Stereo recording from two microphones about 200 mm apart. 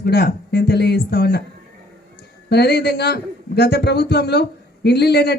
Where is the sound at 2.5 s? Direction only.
55° left (ahead or behind).